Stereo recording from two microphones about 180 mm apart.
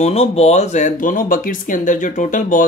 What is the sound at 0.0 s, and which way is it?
Speech, 35° left (ahead or behind).